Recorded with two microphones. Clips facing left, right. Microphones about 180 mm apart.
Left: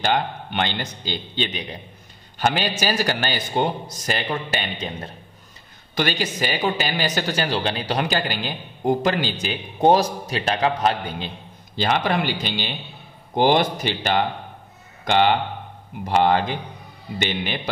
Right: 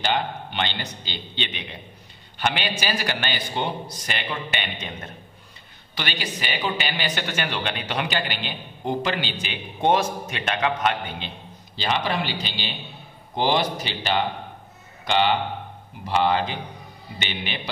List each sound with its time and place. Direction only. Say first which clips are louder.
0.0 s a man's voice: left 3 dB; 50° left (ahead or behind)
5.9 s a woman's voice: left 7 dB; 45° left (ahead or behind)